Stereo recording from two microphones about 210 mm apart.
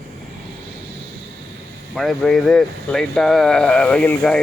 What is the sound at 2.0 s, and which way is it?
Speech, centre (ahead or behind).